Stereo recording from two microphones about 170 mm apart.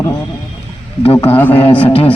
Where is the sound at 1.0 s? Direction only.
35° left (ahead or behind).